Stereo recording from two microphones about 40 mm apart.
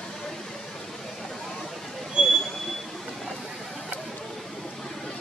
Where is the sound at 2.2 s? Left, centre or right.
Centre.